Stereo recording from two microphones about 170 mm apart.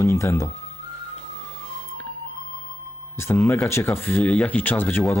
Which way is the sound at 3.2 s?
10° left (ahead or behind).